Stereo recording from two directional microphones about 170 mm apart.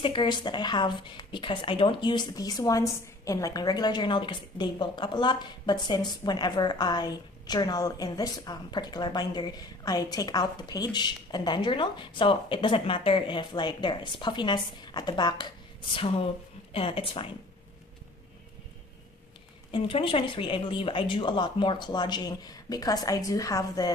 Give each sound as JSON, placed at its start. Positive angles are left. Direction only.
{"t": 0.0, "sound": "a woman's voice", "side_deg": 30}
{"t": 19.7, "sound": "a woman's voice", "side_deg": 30}